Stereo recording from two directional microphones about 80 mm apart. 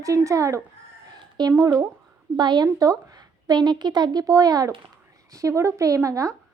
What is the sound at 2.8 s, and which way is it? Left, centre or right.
A woman's voice, right.